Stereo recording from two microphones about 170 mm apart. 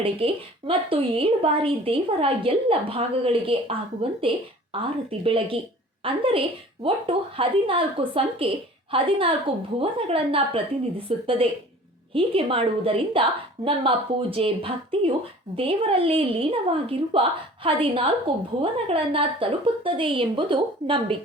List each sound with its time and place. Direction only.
0.2 s a woman's voice: 30° right (ahead or behind)